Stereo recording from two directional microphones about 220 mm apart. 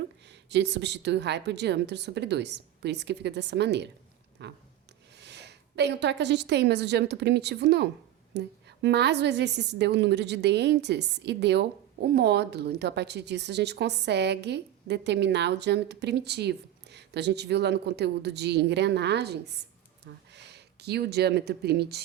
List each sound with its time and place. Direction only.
0.5 s a woman's voice: 50° right (ahead or behind)